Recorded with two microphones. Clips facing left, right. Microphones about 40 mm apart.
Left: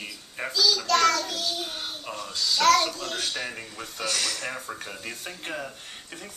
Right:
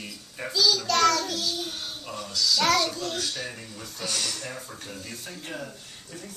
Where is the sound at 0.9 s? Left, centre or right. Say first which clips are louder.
Even; centre.